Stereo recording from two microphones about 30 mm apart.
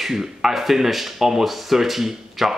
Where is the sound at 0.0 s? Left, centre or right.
Centre.